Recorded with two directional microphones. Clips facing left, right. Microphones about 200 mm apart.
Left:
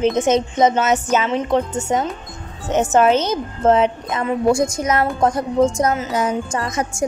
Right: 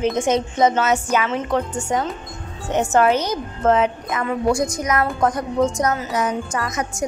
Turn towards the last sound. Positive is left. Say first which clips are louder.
# left 2 dB
turn(degrees=30)  # may be behind; listen again after turning